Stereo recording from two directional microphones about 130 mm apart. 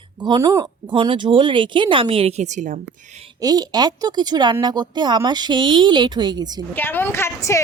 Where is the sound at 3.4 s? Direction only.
30° right (ahead or behind).